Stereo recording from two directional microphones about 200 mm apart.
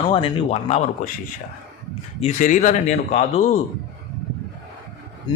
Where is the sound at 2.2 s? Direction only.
35° left (ahead or behind).